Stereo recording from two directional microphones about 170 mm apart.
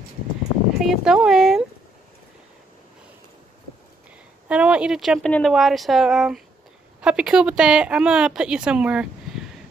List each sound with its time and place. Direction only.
0.7 s speech: centre (ahead or behind)
4.5 s speech: 5° right (ahead or behind)